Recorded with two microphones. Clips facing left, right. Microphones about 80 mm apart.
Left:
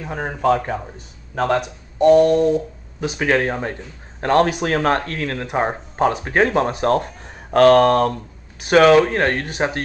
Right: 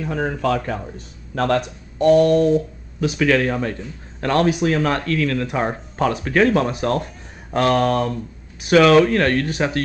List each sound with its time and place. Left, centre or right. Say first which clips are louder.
0.0 s speech: left 1 dB; left
3.0 s speech: right 1 dB; left
4.5 s speech: even; left
7.5 s speech: left 6 dB; left
9.0 s speech: right 2 dB; left